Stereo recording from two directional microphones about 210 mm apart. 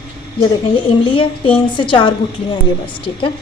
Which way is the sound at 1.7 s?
25° left (ahead or behind).